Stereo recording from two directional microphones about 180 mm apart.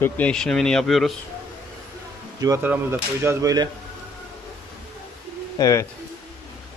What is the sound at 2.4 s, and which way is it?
Speech, 15° right (ahead or behind).